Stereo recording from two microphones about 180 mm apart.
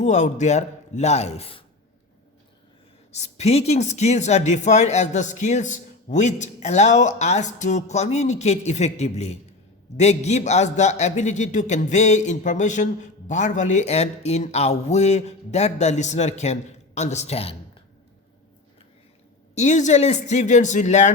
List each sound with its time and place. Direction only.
0.0 s a man's voice: 40° left (ahead or behind)
3.1 s a man's voice: 40° left (ahead or behind)
19.5 s a man's voice: 40° left (ahead or behind)